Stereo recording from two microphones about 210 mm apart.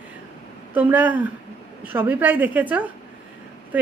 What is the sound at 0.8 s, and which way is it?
A woman's voice, 10° right (ahead or behind).